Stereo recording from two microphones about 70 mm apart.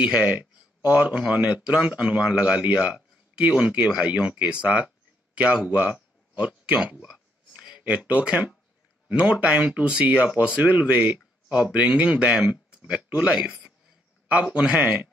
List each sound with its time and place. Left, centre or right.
0.0 s speech: centre
6.8 s a sound: centre
7.8 s speech: centre